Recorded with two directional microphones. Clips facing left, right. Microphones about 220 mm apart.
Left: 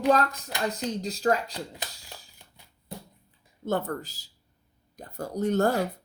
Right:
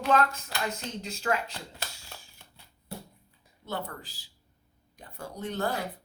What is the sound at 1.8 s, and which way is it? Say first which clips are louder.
Speech: left 2 dB; 15° left (ahead or behind).